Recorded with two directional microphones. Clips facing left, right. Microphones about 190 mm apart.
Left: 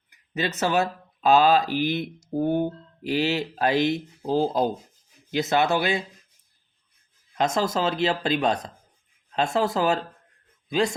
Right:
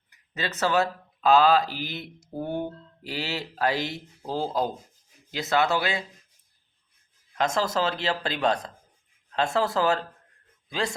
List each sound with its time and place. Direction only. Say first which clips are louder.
0.3 s speech: left 1 dB; 15° left (ahead or behind)
7.3 s a man's voice: left 2 dB; 20° left (ahead or behind)